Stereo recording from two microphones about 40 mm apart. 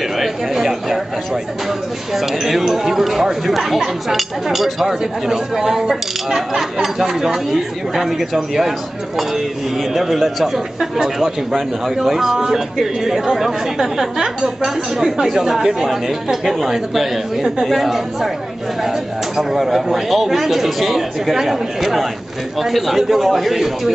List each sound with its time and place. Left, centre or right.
0.2 s a sound: centre
2.1 s speech: centre
9.9 s speech: centre